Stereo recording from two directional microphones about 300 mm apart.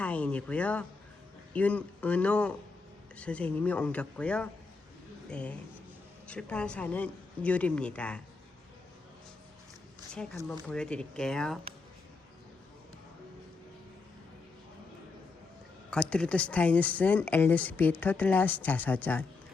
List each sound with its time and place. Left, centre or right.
0.0 s a sound: centre
1.5 s speech: centre
10.5 s speech: centre
15.9 s speech: centre